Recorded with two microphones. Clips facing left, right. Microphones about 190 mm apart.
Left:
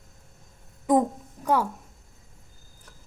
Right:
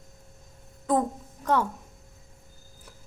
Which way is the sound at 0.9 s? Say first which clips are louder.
Left 4 dB; 15° left (ahead or behind).